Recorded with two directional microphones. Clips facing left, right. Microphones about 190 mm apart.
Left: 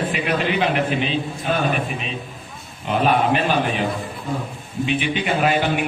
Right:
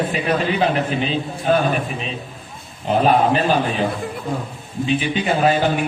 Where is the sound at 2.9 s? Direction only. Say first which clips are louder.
Right 3 dB; 35° right (ahead or behind).